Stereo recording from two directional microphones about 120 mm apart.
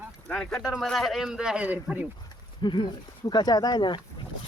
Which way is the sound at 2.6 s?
40° left (ahead or behind).